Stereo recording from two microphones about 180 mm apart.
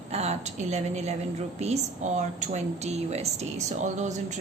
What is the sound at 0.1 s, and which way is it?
Speech, 35° right (ahead or behind).